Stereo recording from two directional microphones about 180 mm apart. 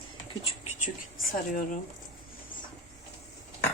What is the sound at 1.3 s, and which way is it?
Speech, 45° left (ahead or behind).